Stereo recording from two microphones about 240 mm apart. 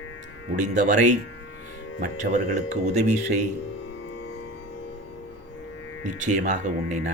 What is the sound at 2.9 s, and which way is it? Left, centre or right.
Speech, right.